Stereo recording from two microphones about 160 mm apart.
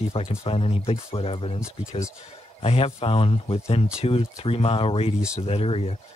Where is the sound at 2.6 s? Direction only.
40° left (ahead or behind).